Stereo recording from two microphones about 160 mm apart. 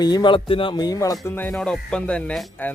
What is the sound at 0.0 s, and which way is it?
Speech, 25° left (ahead or behind).